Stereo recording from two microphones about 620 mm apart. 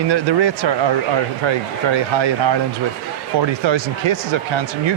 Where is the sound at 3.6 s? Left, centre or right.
Right.